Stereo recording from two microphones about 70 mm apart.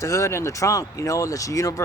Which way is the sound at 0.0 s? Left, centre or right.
Left.